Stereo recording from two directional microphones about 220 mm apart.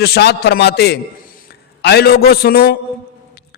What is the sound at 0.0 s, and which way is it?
A man's voice, 50° left (ahead or behind).